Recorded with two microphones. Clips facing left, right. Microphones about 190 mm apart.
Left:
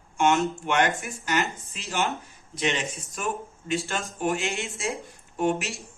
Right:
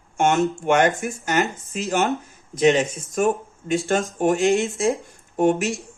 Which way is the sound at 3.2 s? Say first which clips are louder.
Right 11 dB; 45° right (ahead or behind).